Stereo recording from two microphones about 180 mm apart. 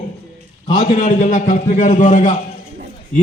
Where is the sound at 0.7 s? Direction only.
45° left (ahead or behind).